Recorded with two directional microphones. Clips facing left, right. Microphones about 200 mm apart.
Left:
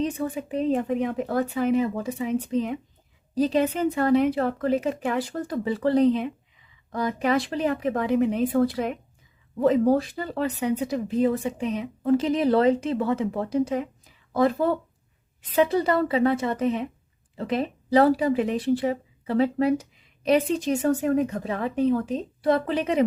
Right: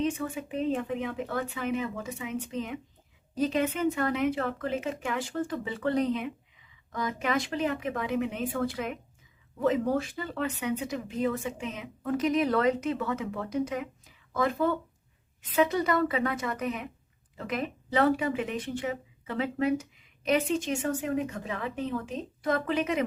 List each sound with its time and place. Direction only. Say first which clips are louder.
0.0 s a woman's voice: left 3 dB; 35° left (ahead or behind)